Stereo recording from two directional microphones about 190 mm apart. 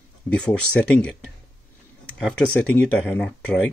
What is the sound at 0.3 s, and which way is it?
Speech, 5° left (ahead or behind).